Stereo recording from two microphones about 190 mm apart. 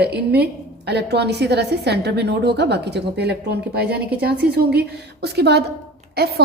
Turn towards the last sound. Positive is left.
turn(degrees=-55)  # may be behind; listen again after turning